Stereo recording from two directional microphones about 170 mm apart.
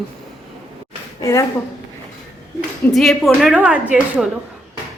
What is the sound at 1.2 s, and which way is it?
Speech, 15° left (ahead or behind).